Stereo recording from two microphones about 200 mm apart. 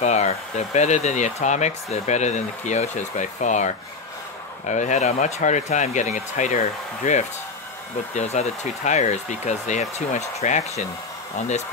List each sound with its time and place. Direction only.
0.0 s speech: 35° left (ahead or behind)